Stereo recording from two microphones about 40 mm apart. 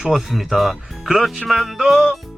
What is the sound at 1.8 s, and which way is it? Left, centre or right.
Speech, centre.